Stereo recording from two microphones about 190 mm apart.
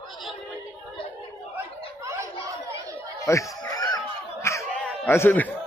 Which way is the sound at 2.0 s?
15° right (ahead or behind).